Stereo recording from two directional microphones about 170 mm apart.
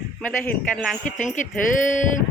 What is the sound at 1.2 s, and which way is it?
Speech, 50° left (ahead or behind).